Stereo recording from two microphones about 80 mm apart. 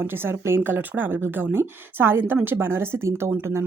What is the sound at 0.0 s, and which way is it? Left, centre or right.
Speech, right.